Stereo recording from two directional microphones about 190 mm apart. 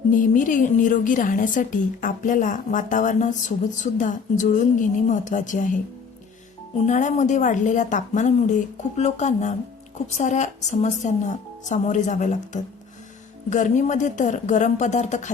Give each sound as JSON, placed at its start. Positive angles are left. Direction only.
{"t": 0.1, "sound": "a woman's voice", "side_deg": 45}
{"t": 6.8, "sound": "speech", "side_deg": 40}